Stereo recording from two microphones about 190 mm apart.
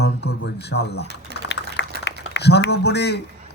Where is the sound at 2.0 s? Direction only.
65° left (ahead or behind).